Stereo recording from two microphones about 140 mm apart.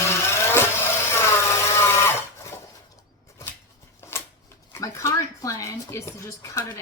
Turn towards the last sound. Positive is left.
turn(degrees=20)  # may be behind; listen again after turning